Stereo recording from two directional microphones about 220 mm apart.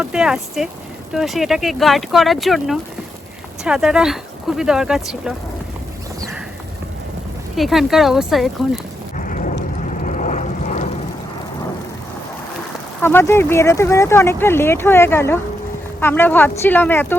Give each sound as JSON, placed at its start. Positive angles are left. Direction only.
{"t": 0.0, "sound": "speech", "side_deg": -5}
{"t": 7.5, "sound": "speech", "side_deg": 0}
{"t": 9.1, "sound": "a sound", "side_deg": 35}
{"t": 9.8, "sound": "vehicle", "side_deg": 35}
{"t": 13.0, "sound": "speech", "side_deg": 10}